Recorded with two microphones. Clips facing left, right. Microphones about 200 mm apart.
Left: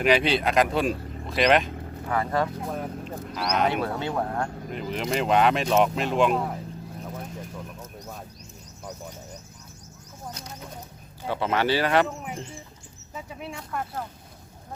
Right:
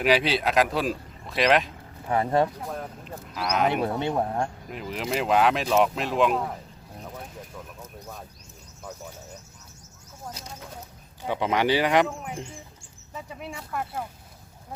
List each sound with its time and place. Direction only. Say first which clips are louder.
0.0 s speech: left 1 dB; centre (ahead or behind)
2.0 s speech: right 3 dB; 25° right (ahead or behind)
2.6 s speech: left 3 dB; centre (ahead or behind)
3.7 s speech: right 2 dB; 20° right (ahead or behind)
4.7 s speech: left 2 dB; 5° right (ahead or behind)
7.8 s a sound: left 1 dB; 10° left (ahead or behind)
11.3 s speech: right 1 dB; 15° right (ahead or behind)
13.1 s speech: even; centre (ahead or behind)